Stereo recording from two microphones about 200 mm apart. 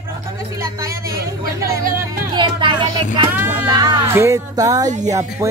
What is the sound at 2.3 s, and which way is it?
Speech, 25° right (ahead or behind).